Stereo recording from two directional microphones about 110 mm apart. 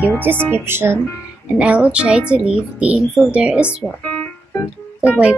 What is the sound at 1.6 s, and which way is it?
Speech, 10° right (ahead or behind).